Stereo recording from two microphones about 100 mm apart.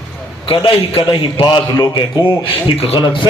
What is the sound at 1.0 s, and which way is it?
A man's voice, 50° left (ahead or behind).